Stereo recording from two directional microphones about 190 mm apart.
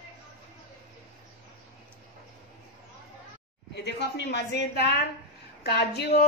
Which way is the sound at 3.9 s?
60° left (ahead or behind).